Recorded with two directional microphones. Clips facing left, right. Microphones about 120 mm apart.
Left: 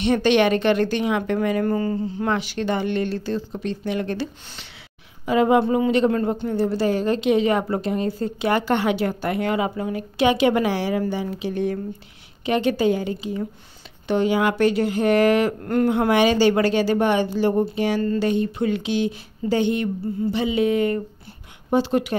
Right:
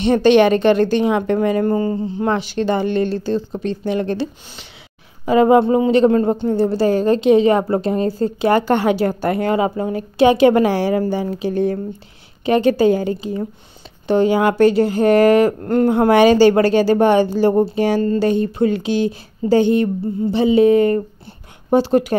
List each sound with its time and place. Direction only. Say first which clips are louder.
0.0 s speech: right 6 dB; 35° right (ahead or behind)